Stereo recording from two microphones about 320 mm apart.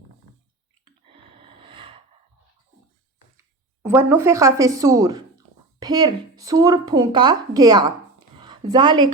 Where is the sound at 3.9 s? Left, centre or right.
Centre.